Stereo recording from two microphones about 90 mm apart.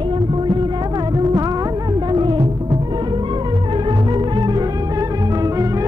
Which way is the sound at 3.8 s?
60° right (ahead or behind).